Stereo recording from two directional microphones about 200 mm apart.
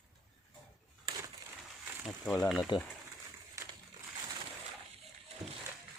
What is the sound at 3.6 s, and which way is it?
Crushing, 15° right (ahead or behind).